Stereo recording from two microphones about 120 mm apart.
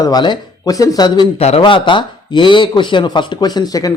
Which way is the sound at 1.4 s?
60° left (ahead or behind).